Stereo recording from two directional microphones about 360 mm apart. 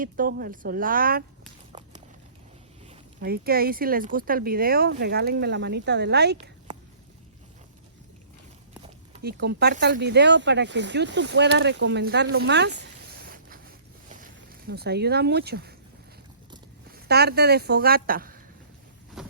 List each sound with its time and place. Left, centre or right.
0.0 s speech: right
1.7 s a sound: centre
2.9 s speech: right
9.2 s speech: right
14.7 s speech: right
16.9 s speech: right
19.2 s a sound: centre